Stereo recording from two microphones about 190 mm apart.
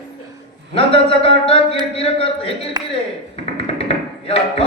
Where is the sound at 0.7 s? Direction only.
30° left (ahead or behind).